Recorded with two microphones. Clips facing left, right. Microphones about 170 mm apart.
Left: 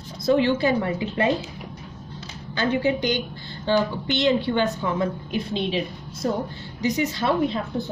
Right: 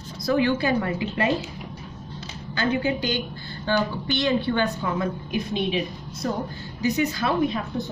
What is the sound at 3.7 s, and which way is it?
A woman's voice, 20° left (ahead or behind).